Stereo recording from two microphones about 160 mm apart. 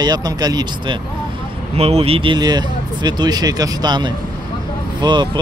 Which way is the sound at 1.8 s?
40° right (ahead or behind).